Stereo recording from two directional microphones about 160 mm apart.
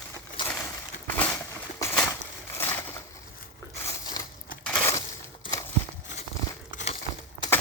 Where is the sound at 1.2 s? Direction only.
10° left (ahead or behind).